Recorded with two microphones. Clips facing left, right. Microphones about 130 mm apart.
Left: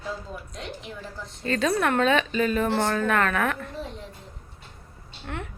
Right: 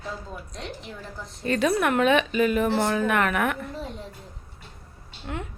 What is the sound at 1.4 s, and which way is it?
A woman's voice, 15° right (ahead or behind).